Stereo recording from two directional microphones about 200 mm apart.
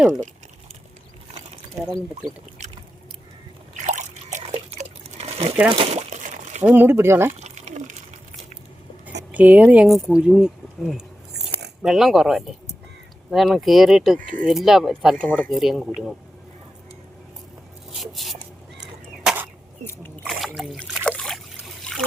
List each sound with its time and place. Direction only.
0.0 s speech: centre (ahead or behind)
3.8 s liquid: 35° right (ahead or behind)
5.7 s crumpling: 30° right (ahead or behind)
6.7 s speech: 10° right (ahead or behind)
7.3 s water: 35° right (ahead or behind)
9.3 s speech: 10° right (ahead or behind)
17.9 s a sound: centre (ahead or behind)
19.8 s boat: 10° left (ahead or behind)